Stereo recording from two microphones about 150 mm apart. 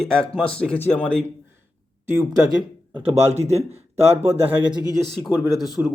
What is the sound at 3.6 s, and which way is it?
Speech, 15° right (ahead or behind).